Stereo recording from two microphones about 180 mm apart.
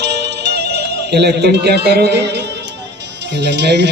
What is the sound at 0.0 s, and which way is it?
Music, 70° right (ahead or behind).